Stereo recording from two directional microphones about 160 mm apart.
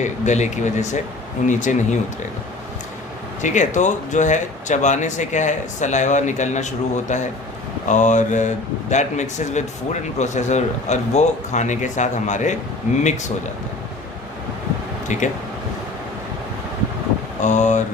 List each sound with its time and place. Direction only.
0.0 s speech: 50° left (ahead or behind)
3.4 s speech: 50° left (ahead or behind)
15.0 s speech: 50° left (ahead or behind)
17.4 s speech: 50° left (ahead or behind)